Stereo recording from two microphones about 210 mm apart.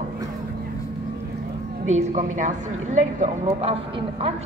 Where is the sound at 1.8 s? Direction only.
35° right (ahead or behind).